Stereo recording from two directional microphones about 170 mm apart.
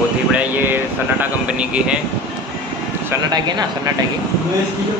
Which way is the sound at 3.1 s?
25° right (ahead or behind).